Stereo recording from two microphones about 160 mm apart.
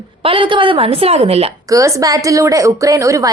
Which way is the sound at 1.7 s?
20° right (ahead or behind).